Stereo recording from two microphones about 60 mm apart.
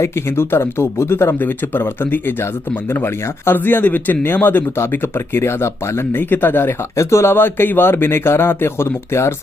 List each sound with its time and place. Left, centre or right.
0.0 s speech: left
6.1 s speech: left
6.9 s speech: left